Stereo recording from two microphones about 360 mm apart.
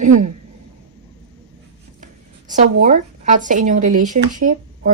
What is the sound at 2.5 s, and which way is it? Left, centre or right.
Speech, right.